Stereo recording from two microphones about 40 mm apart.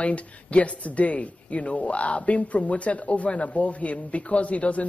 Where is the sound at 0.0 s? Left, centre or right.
Left.